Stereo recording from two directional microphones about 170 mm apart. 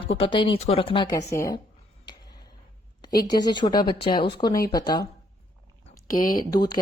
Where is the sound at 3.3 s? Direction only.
25° left (ahead or behind).